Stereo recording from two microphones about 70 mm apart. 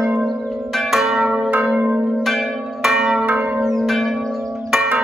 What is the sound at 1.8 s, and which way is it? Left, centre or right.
Change ringing, right.